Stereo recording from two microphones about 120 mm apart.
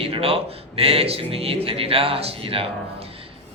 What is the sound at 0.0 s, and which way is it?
A man's voice, 55° right (ahead or behind).